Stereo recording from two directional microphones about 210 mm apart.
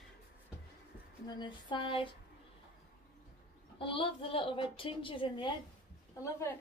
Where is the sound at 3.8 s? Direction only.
25° left (ahead or behind).